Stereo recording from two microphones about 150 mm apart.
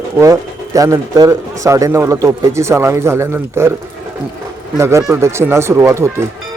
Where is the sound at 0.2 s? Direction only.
20° right (ahead or behind).